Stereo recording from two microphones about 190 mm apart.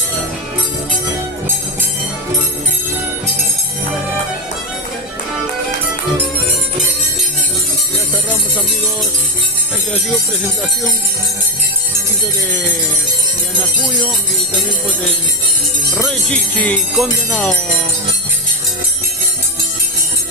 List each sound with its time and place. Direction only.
16.0 s music: 5° left (ahead or behind)